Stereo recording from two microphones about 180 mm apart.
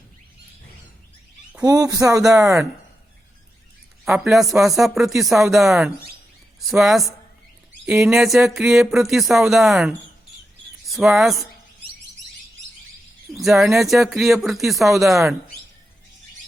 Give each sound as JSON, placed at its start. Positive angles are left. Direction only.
{"t": 1.6, "sound": "speech", "side_deg": -20}
{"t": 2.2, "sound": "speech", "side_deg": -5}
{"t": 4.1, "sound": "speech", "side_deg": 0}
{"t": 13.3, "sound": "speech", "side_deg": 0}